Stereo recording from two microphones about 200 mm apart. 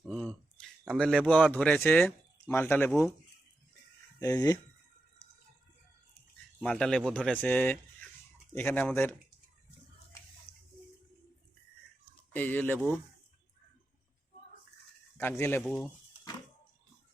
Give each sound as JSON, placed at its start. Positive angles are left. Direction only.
{"t": 0.0, "sound": "speech", "side_deg": 0}
{"t": 4.2, "sound": "speech", "side_deg": 15}
{"t": 6.6, "sound": "speech", "side_deg": 5}
{"t": 10.5, "sound": "a sound", "side_deg": 30}
{"t": 12.3, "sound": "speech", "side_deg": 10}
{"t": 15.2, "sound": "speech", "side_deg": 10}